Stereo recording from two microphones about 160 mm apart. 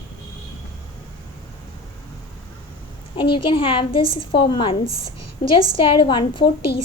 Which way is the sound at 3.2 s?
30° left (ahead or behind).